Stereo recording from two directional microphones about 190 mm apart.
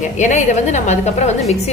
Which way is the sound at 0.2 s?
40° left (ahead or behind).